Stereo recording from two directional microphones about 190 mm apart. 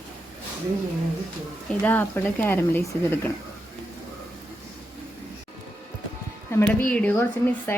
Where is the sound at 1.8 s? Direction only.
10° left (ahead or behind).